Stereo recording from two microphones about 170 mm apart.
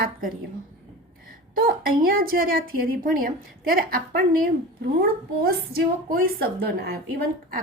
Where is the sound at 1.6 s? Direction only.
60° right (ahead or behind).